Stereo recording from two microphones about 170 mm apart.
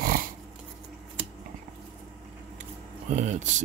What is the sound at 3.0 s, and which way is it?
Speech, 45° right (ahead or behind).